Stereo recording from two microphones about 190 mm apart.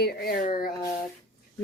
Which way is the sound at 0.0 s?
55° left (ahead or behind).